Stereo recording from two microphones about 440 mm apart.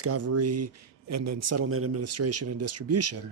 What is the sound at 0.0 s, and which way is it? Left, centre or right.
Speech, right.